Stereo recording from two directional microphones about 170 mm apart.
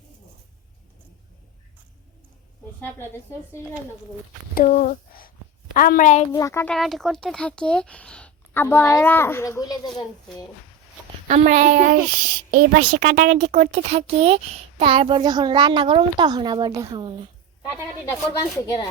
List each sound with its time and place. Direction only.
4.6 s a woman's voice: 45° left (ahead or behind)
6.3 s a woman's voice: 15° left (ahead or behind)
6.7 s a woman's voice: centre (ahead or behind); by 10.4 s 25° left (ahead or behind)
11.3 s a child's voice: 45° right (ahead or behind); by 17.2 s 30° right (ahead or behind)
18.1 s speech: 20° left (ahead or behind)